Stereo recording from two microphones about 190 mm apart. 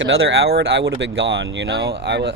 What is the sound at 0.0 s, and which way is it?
Speech, 65° right (ahead or behind).